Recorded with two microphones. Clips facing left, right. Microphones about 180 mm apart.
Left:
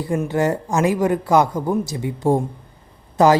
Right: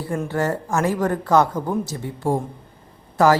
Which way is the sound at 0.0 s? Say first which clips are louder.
Left 3 dB; 15° left (ahead or behind).